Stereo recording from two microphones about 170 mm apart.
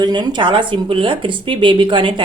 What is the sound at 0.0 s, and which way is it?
A woman's voice, 25° right (ahead or behind).